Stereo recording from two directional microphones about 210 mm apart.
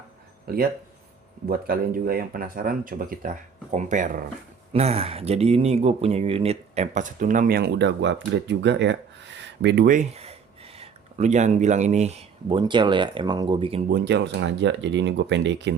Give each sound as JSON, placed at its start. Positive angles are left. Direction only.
{"t": 0.5, "sound": "speech", "side_deg": -45}
{"t": 13.9, "sound": "speech", "side_deg": -55}